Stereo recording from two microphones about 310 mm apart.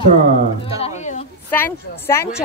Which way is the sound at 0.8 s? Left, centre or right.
Left.